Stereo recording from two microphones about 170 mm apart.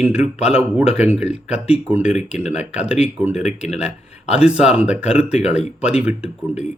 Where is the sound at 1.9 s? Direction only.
5° right (ahead or behind).